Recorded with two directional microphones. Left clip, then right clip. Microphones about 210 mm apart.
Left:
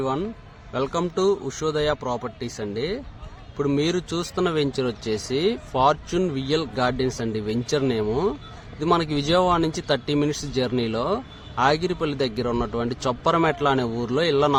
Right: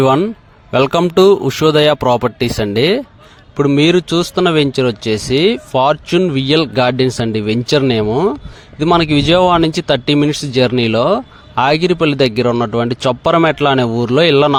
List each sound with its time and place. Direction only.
0.0 s a man's voice: 45° right (ahead or behind)